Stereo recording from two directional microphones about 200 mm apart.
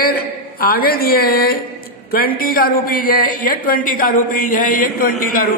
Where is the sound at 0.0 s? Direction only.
50° left (ahead or behind).